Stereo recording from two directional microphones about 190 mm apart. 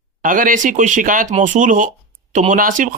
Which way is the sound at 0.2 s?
45° right (ahead or behind).